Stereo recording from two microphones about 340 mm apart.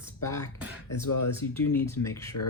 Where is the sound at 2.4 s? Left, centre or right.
Left.